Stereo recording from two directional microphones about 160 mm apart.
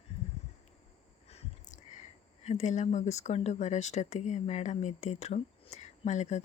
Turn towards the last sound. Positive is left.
turn(degrees=45)  # may be behind; listen again after turning